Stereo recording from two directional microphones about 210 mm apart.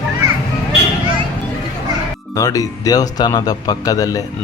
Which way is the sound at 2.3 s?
15° left (ahead or behind).